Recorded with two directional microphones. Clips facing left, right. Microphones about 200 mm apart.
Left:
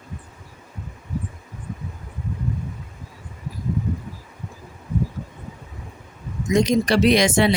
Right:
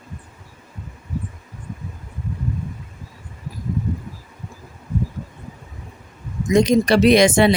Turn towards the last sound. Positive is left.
turn(degrees=-55)  # may be behind; listen again after turning